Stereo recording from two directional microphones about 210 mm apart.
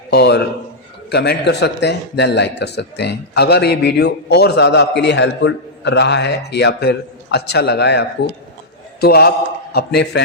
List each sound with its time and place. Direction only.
0.1 s a man's voice: 55° left (ahead or behind)